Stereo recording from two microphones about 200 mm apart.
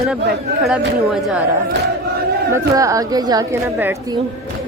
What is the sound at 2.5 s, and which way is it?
Speech, 15° right (ahead or behind).